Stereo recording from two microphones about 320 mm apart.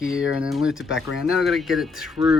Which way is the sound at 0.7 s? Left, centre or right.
Left.